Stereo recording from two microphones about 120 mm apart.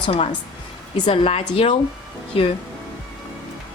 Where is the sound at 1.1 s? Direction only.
55° left (ahead or behind).